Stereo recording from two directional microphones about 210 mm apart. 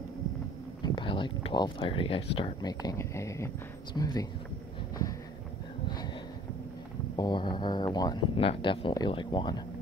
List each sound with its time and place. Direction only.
0.8 s speech: 25° left (ahead or behind)
7.2 s speech: 20° left (ahead or behind)